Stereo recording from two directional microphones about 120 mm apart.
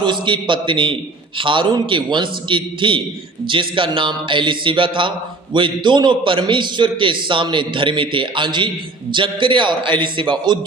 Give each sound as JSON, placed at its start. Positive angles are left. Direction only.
{"t": 0.0, "sound": "a man's voice", "side_deg": -40}